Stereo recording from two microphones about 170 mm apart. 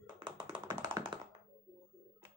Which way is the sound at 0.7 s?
25° right (ahead or behind).